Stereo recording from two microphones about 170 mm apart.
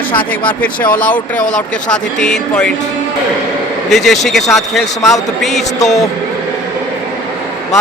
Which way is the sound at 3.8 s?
Centre (ahead or behind).